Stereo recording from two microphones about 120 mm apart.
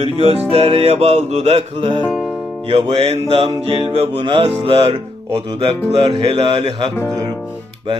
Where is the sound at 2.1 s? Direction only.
Centre (ahead or behind).